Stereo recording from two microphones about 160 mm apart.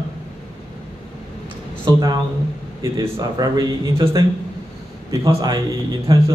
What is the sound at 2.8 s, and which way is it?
A man's voice, 20° right (ahead or behind).